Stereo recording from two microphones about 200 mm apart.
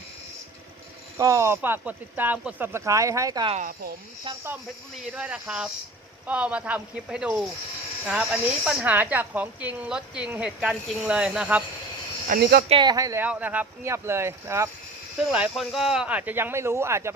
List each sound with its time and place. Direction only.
1.2 s speech: 15° right (ahead or behind)
3.5 s speech: 45° right (ahead or behind)
5.1 s speech: 5° right (ahead or behind)
12.3 s speech: 50° right (ahead or behind)
12.6 s speech: 25° right (ahead or behind)
15.3 s speech: centre (ahead or behind)